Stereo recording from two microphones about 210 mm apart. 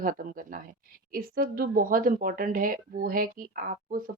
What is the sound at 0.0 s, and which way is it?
A woman's voice, 40° right (ahead or behind).